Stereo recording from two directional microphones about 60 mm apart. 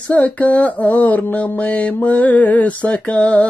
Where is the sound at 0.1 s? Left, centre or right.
Left.